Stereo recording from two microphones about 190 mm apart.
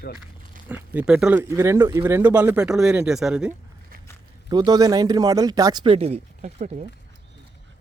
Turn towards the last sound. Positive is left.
turn(degrees=-40)  # may be behind; listen again after turning